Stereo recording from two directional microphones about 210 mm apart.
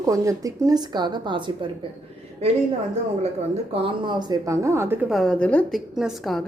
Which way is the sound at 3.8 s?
20° right (ahead or behind).